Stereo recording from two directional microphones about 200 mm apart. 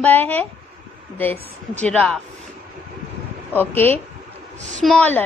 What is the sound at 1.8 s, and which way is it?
Speech, 5° left (ahead or behind).